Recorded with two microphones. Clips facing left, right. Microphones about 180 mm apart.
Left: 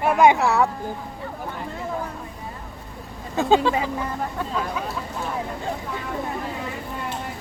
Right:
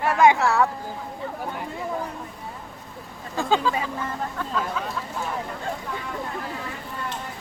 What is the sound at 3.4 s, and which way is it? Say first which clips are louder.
Speech: left 4 dB; 25° left (ahead or behind).